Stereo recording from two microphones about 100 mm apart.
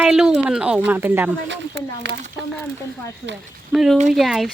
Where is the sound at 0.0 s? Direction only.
10° right (ahead or behind).